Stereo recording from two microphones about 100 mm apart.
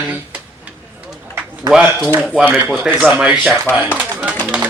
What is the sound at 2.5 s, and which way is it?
Speech, 20° right (ahead or behind).